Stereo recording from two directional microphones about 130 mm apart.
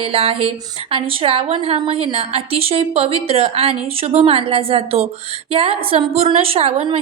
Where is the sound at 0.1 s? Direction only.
50° right (ahead or behind).